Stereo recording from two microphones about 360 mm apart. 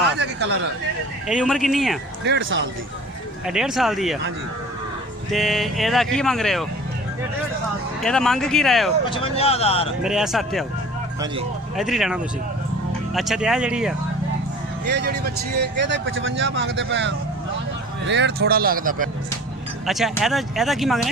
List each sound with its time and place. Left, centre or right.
0.2 s a sound: right
1.3 s speech: centre
2.2 s speech: right
3.4 s speech: centre
5.3 s speech: centre
8.0 s speech: centre
9.0 s speech: centre
10.0 s speech: centre
11.8 s speech: centre
14.8 s speech: right
19.9 s speech: centre